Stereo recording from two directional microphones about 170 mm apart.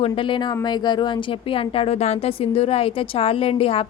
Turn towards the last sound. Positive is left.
turn(degrees=35)  # may be behind; listen again after turning